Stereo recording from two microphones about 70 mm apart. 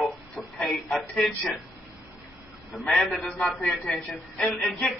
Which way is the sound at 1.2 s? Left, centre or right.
Centre.